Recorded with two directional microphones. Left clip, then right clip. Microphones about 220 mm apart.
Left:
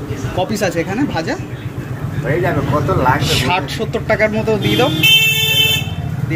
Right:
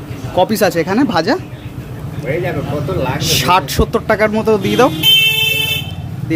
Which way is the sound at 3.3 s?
30° right (ahead or behind).